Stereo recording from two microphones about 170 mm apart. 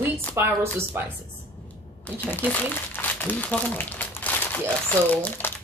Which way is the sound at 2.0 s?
10° left (ahead or behind).